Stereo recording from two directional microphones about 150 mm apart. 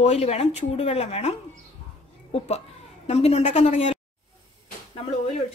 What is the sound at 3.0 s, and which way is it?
Speech, 45° left (ahead or behind).